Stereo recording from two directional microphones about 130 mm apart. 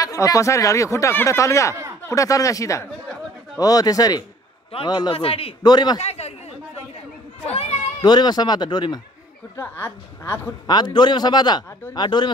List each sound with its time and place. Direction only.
0.0 s speech: 25° left (ahead or behind)
5.1 s a man's voice: 50° left (ahead or behind)
5.6 s speech: 35° left (ahead or behind)
5.9 s a man's voice: 55° left (ahead or behind)
8.0 s speech: 35° left (ahead or behind)
9.6 s a woman's voice: 15° left (ahead or behind)
10.7 s speech: 35° left (ahead or behind)